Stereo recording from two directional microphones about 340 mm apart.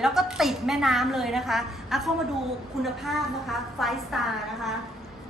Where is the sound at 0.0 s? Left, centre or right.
Centre.